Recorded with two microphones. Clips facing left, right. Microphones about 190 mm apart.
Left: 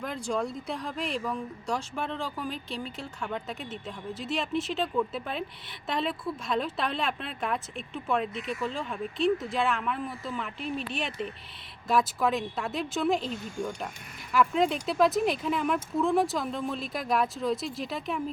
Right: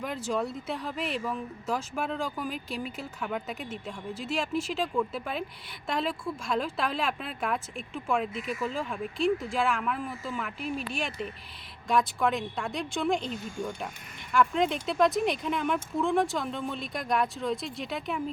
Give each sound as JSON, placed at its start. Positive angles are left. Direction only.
{"t": 0.0, "sound": "speech", "side_deg": -5}
{"t": 14.3, "sound": "speech", "side_deg": 0}